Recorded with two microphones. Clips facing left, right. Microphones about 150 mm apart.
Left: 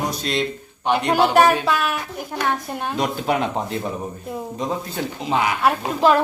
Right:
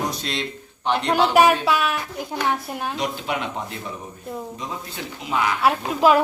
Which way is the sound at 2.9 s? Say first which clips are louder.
Left 6 dB; 50° left (ahead or behind).